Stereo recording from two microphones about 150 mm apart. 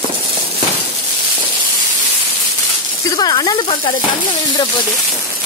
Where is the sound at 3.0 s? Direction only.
25° left (ahead or behind).